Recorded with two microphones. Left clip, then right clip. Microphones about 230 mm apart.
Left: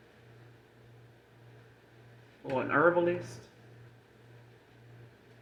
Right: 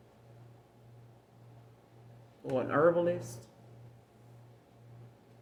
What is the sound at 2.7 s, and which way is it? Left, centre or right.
Speech, right.